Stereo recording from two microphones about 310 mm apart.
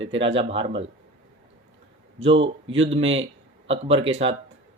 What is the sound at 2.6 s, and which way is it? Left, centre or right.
Speech, right.